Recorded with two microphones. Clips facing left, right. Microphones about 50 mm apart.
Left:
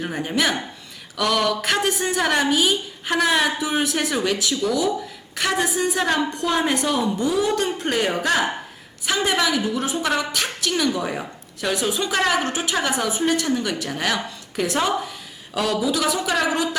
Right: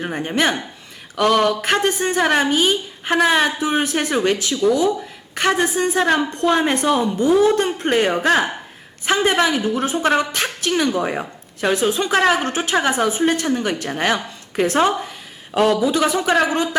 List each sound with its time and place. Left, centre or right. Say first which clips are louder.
0.0 s a woman's voice: right 2 dB; right
1.1 s a sound: right 5 dB; right
2.0 s a woman's voice: right 3 dB; right